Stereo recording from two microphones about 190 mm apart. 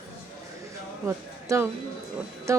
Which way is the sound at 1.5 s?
15° right (ahead or behind).